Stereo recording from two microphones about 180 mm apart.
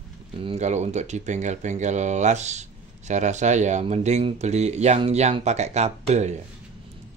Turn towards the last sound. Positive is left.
turn(degrees=-40)  # may be behind; listen again after turning